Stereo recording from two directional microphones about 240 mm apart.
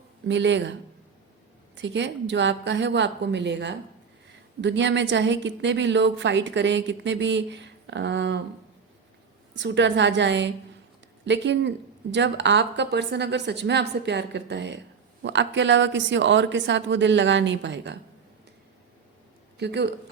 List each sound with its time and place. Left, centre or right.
0.3 s a woman's voice: right
9.6 s a woman's voice: right
19.5 s speech: right